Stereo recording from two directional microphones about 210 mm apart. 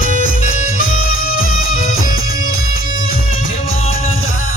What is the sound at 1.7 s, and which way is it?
Music, 40° left (ahead or behind).